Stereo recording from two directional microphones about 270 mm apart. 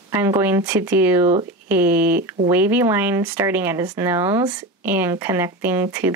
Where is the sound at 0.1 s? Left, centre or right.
Centre.